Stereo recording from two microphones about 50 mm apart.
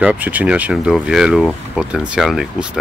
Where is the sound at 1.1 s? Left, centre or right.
Centre.